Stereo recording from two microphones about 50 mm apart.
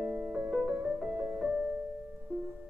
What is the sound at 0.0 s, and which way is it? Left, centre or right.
Music, right.